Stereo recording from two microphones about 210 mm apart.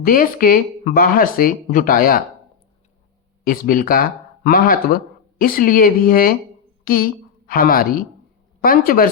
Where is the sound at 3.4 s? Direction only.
45° left (ahead or behind).